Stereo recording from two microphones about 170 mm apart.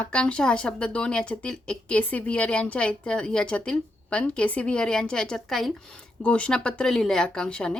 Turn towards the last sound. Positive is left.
turn(degrees=5)  # may be behind; listen again after turning